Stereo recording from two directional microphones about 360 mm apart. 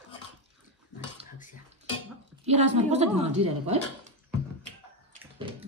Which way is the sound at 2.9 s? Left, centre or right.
Centre.